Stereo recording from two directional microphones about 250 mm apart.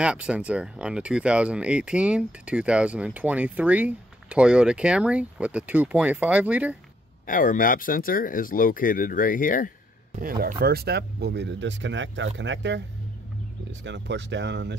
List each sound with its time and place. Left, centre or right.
0.0 s speech: centre
7.2 s speech: left
10.6 s speech: right